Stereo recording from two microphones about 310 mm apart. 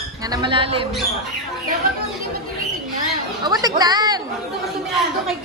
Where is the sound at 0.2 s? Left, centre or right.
Centre.